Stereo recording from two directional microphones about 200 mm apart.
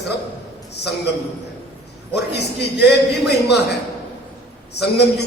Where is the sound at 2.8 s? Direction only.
55° left (ahead or behind).